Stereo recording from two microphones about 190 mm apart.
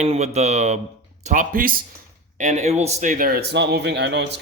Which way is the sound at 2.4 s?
35° right (ahead or behind).